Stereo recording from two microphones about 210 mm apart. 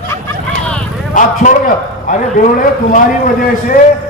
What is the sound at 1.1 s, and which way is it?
A man's voice, 35° left (ahead or behind).